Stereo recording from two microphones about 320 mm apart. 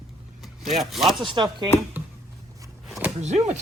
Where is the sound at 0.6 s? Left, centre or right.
Centre.